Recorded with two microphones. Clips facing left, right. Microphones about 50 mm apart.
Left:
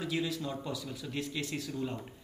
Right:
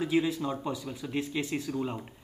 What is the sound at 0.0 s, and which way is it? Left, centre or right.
Speech, right.